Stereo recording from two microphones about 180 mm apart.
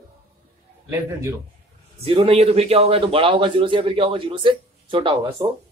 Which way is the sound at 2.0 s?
30° right (ahead or behind).